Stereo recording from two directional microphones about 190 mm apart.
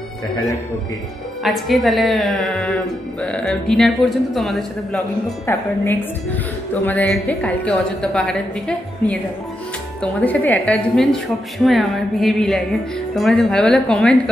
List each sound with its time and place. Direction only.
1.4 s a woman's voice: centre (ahead or behind)
5.5 s a woman's voice: 10° left (ahead or behind)
10.2 s a woman's voice: 10° left (ahead or behind)